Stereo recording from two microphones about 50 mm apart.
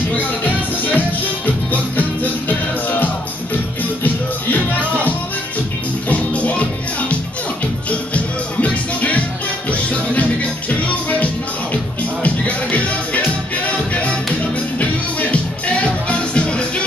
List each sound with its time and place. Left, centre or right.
0.1 s music: left
6.0 s music: left
11.7 s music: left
14.8 s music: left